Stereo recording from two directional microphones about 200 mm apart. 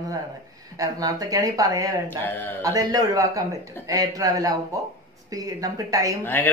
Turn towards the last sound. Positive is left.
turn(degrees=10)  # may be behind; listen again after turning